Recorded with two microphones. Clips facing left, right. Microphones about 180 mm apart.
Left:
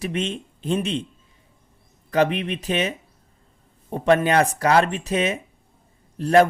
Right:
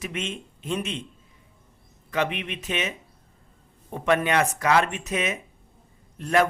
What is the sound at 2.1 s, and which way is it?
Speech, 35° left (ahead or behind).